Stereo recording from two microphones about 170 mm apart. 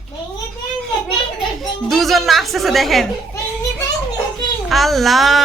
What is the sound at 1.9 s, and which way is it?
Speech, centre (ahead or behind).